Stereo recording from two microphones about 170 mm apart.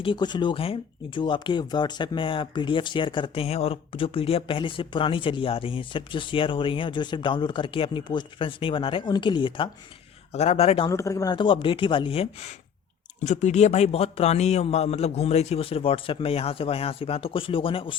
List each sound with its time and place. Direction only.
0.0 s speech: 25° left (ahead or behind)
10.3 s speech: 40° left (ahead or behind)
10.8 s speech: 20° left (ahead or behind)
13.1 s speech: 45° left (ahead or behind)